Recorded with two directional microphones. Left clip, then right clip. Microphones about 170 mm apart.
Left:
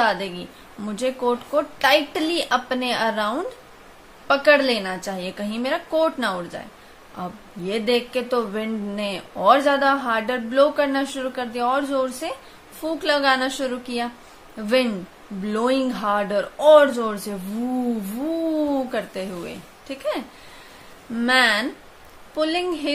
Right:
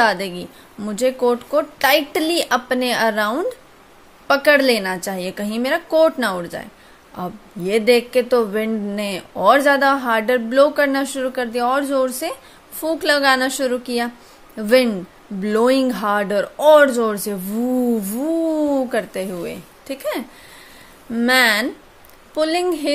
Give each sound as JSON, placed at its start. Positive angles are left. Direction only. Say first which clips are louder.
{"t": 0.0, "sound": "a woman's voice", "louder": "right 4 dB", "side_deg": -40}